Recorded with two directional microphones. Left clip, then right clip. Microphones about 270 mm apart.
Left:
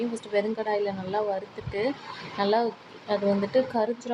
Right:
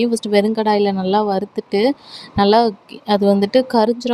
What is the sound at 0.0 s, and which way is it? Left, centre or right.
A woman's voice, right.